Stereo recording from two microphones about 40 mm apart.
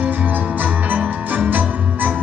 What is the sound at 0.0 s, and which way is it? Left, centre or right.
Music, right.